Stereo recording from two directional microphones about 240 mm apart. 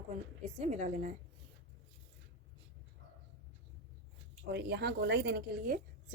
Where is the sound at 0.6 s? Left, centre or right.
Right.